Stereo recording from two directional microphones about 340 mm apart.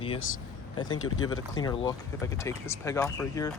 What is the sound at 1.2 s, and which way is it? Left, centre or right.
Speech, centre.